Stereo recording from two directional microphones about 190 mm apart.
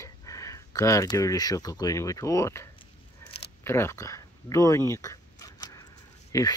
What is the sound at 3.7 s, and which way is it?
Speech, 15° left (ahead or behind).